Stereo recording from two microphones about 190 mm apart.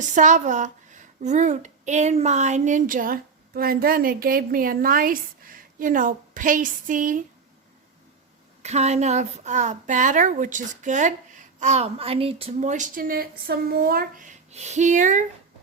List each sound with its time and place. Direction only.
0.0 s speech: 40° right (ahead or behind)
8.6 s a woman's voice: 35° right (ahead or behind)